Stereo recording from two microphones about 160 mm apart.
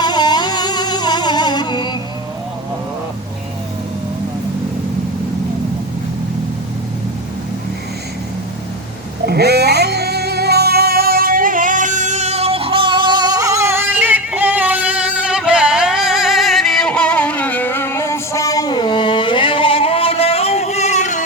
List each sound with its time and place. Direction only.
0.0 s music: 25° left (ahead or behind)
9.2 s music: 85° right; by 21.2 s 45° left (ahead or behind)